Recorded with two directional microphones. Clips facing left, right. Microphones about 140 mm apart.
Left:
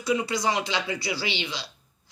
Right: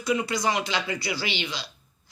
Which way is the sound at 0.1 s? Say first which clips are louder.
Even; 25° left (ahead or behind).